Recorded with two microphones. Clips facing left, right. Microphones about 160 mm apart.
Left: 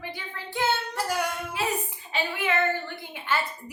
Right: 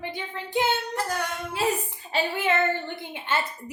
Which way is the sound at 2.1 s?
30° right (ahead or behind).